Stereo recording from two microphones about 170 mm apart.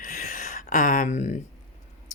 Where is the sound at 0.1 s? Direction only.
50° left (ahead or behind).